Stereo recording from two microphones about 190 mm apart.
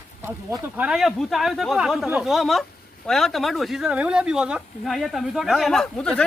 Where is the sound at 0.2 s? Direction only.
10° right (ahead or behind).